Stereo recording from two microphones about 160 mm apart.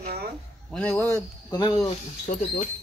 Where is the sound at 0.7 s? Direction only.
10° left (ahead or behind).